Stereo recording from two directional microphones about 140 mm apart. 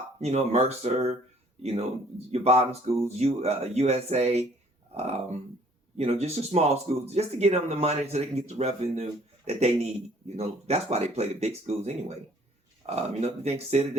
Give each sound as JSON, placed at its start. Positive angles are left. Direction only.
{"t": 0.2, "sound": "speech", "side_deg": -50}